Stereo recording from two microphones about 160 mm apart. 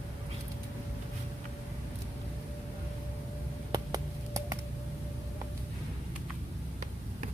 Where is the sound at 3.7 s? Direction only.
25° right (ahead or behind).